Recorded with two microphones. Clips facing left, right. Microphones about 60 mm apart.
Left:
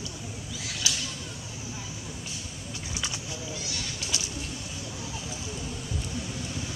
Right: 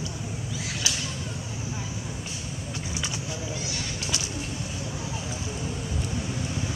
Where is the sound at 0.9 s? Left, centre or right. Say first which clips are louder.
Even; right.